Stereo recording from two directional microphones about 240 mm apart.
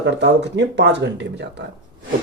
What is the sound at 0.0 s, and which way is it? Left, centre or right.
Speech, right.